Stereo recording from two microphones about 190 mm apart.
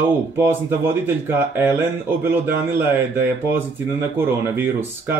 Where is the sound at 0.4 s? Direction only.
10° right (ahead or behind).